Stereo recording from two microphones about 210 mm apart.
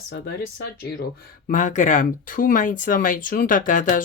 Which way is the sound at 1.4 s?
35° left (ahead or behind).